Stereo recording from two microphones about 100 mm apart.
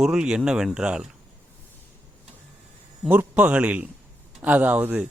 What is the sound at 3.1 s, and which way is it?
Speech, 15° right (ahead or behind).